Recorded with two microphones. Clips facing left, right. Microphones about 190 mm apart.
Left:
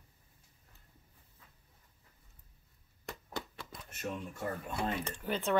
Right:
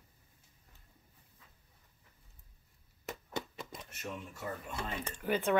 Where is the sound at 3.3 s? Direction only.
20° right (ahead or behind).